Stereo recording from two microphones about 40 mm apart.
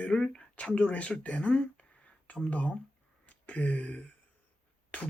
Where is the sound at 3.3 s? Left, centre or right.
Left.